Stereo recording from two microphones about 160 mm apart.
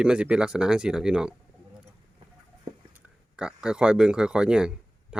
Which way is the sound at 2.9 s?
5° right (ahead or behind).